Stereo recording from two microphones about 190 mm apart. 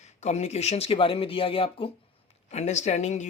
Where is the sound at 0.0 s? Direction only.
35° left (ahead or behind).